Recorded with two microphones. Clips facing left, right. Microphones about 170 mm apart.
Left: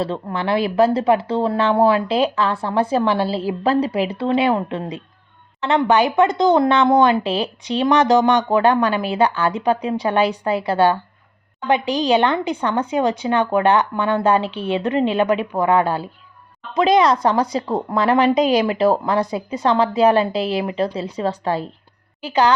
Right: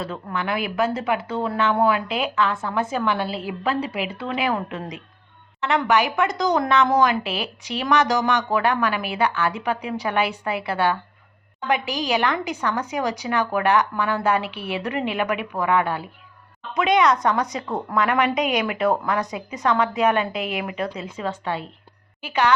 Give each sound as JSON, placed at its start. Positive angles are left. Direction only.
{"t": 0.0, "sound": "a woman's voice", "side_deg": 30}